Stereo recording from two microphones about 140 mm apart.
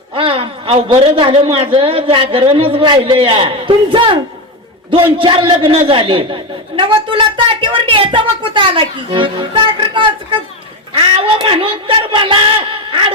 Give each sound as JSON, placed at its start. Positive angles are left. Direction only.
{"t": 0.1, "sound": "a man's voice", "side_deg": -40}
{"t": 11.2, "sound": "a man's voice", "side_deg": -35}